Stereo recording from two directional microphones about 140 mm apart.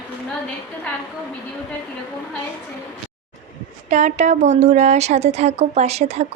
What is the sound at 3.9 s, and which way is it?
A woman's voice, 55° right (ahead or behind).